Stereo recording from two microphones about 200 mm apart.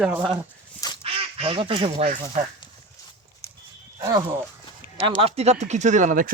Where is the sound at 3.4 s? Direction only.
15° left (ahead or behind).